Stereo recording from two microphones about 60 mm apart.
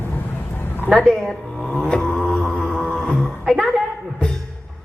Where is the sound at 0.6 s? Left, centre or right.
Left.